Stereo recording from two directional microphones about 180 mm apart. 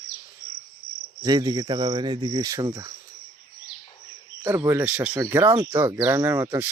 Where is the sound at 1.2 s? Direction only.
20° right (ahead or behind).